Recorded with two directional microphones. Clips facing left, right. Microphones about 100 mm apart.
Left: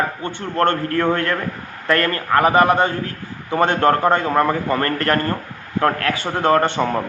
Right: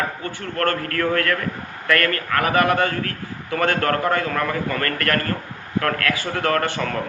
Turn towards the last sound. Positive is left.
turn(degrees=25)  # may be behind; listen again after turning